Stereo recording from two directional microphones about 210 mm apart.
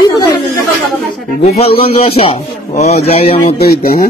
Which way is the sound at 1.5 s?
30° left (ahead or behind).